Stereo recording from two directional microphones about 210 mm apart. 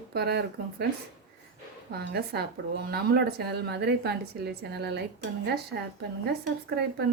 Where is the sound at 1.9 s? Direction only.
50° right (ahead or behind).